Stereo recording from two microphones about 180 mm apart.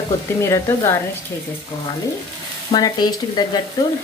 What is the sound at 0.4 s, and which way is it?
Speech, 15° left (ahead or behind).